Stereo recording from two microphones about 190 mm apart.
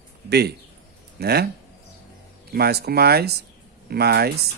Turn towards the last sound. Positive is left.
turn(degrees=-55)  # may be behind; listen again after turning